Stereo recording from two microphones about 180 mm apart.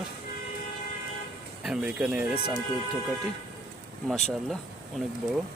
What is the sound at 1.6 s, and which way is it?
Speech, 5° right (ahead or behind).